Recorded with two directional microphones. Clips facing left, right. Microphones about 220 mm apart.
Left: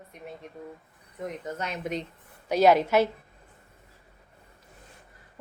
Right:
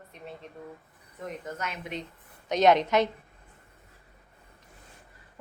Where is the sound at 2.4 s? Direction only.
5° left (ahead or behind).